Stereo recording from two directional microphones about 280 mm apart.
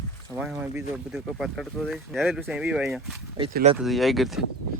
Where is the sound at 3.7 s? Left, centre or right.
Centre.